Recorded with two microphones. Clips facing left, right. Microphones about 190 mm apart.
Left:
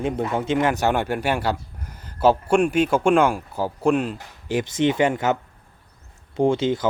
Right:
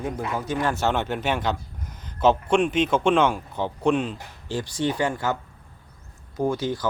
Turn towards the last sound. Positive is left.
turn(degrees=25)  # may be behind; listen again after turning